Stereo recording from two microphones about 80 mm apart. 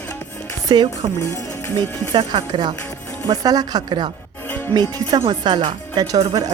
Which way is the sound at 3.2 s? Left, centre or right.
Right.